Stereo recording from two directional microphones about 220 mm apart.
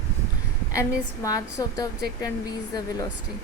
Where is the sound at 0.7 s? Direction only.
15° left (ahead or behind).